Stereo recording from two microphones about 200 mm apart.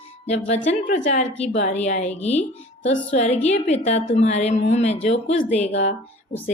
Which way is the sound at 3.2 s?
35° left (ahead or behind).